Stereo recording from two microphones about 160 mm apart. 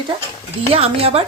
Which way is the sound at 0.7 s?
40° right (ahead or behind).